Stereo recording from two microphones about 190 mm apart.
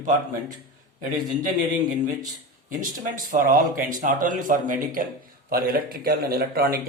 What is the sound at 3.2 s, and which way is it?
A man's voice, 45° right (ahead or behind).